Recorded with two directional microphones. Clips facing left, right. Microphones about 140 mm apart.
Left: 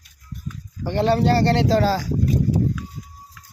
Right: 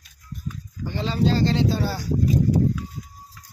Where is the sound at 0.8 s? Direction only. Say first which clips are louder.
Left 5 dB; 70° left (ahead or behind); by 2.0 s 90° left.